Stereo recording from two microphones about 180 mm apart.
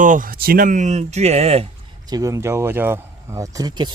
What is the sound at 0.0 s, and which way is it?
Speech, 45° right (ahead or behind).